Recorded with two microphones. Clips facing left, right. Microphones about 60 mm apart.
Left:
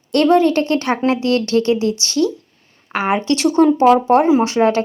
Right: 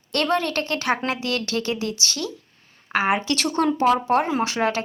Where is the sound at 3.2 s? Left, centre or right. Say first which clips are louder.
Left 9 dB; left.